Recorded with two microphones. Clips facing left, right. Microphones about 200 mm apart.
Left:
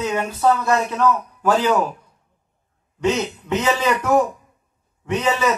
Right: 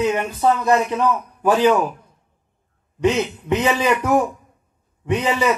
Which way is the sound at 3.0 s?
15° right (ahead or behind).